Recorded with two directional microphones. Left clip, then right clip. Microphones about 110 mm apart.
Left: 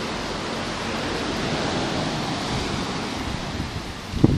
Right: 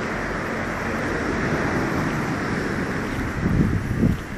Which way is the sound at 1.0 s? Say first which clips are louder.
Right 2 dB; 35° left (ahead or behind).